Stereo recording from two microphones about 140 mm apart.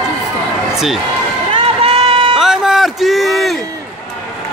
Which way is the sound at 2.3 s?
5° right (ahead or behind).